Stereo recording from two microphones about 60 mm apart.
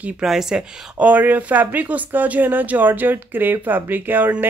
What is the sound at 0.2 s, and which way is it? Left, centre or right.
Speech, centre.